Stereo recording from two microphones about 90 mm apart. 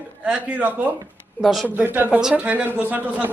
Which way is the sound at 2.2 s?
10° right (ahead or behind).